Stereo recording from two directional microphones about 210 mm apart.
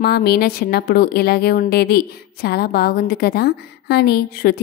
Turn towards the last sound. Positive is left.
turn(degrees=50)  # may be behind; listen again after turning